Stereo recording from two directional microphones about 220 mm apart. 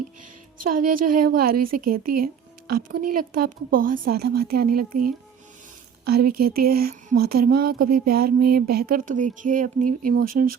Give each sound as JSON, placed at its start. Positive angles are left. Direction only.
{"t": 0.6, "sound": "a woman's voice", "side_deg": -40}